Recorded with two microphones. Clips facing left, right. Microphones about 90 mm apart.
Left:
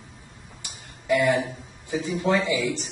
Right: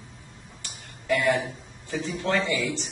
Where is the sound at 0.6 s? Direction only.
15° left (ahead or behind).